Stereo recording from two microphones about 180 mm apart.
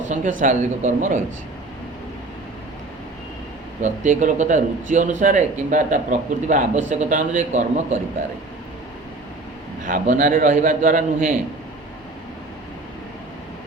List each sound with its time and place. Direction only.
0.1 s a man's voice: 45° right (ahead or behind)
3.8 s a man's voice: 45° right (ahead or behind)
9.8 s a man's voice: 45° right (ahead or behind)